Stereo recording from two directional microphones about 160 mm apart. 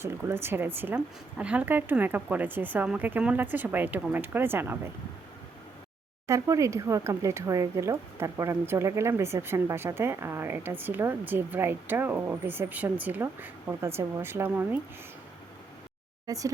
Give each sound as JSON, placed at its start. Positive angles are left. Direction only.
{"t": 0.0, "sound": "speech", "side_deg": -15}
{"t": 6.2, "sound": "speech", "side_deg": -20}
{"t": 16.2, "sound": "speech", "side_deg": -20}